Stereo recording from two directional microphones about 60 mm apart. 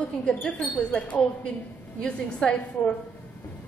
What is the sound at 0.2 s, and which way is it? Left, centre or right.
Speech, centre.